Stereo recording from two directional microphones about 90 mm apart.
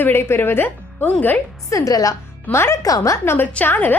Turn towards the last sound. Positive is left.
turn(degrees=20)  # may be behind; listen again after turning